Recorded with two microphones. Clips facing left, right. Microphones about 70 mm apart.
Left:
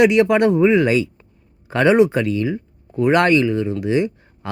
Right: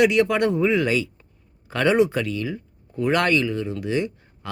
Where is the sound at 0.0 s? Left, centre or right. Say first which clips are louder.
Left 5 dB; left.